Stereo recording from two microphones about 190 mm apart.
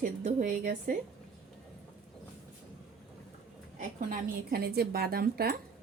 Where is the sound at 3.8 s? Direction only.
50° right (ahead or behind).